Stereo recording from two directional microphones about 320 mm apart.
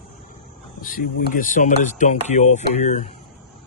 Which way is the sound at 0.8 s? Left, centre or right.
Left.